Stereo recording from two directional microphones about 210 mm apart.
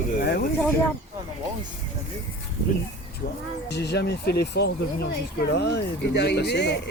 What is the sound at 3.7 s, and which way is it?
Speech, 55° left (ahead or behind).